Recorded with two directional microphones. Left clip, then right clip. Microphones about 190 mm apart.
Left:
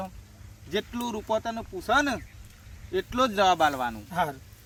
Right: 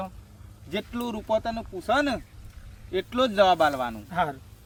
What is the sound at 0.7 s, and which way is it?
Speech, 20° right (ahead or behind).